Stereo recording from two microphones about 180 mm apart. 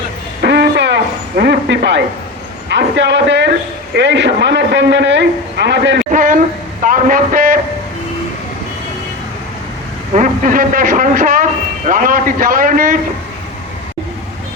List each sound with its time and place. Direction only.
0.4 s a sound: 70° right (ahead or behind)
1.4 s a man's voice: 70° right (ahead or behind)
6.1 s speech: 50° right (ahead or behind)
10.2 s speech: 50° right (ahead or behind)